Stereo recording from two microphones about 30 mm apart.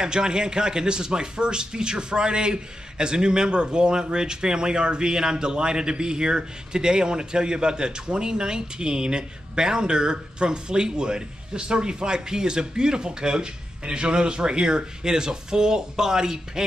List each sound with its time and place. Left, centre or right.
0.0 s speech: right